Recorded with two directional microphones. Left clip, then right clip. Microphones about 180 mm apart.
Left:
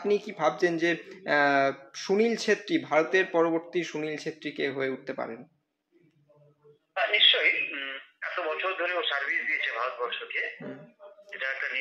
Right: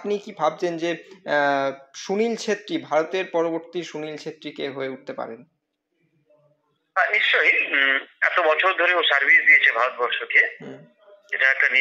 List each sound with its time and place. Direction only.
0.0 s speech: 10° right (ahead or behind)
7.4 s a man's voice: 50° right (ahead or behind)